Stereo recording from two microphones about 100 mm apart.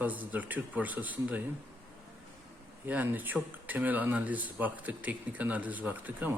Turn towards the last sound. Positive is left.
turn(degrees=-15)  # may be behind; listen again after turning